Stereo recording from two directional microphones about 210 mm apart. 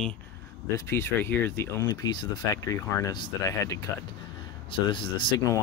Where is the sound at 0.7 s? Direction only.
10° left (ahead or behind).